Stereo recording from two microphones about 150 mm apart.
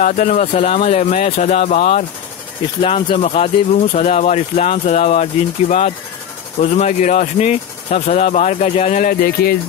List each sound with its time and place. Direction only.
0.0 s speech: 60° left (ahead or behind)
9.2 s speech: 85° left